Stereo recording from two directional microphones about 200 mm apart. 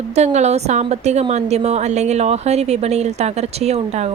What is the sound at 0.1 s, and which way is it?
A woman's voice, 35° right (ahead or behind).